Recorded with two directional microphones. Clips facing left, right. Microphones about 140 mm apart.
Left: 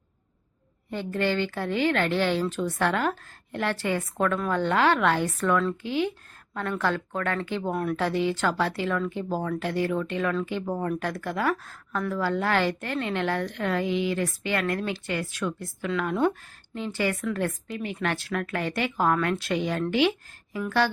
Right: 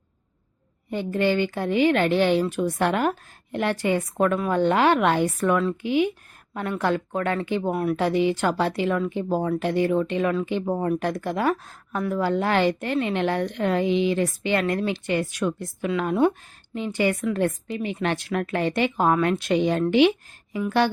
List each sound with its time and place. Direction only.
0.9 s a woman's voice: 15° right (ahead or behind)